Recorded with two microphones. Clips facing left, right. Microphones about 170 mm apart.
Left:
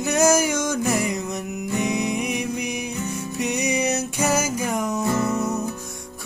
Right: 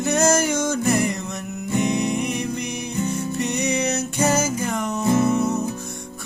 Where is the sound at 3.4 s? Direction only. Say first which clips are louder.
Left 1 dB; 10° left (ahead or behind).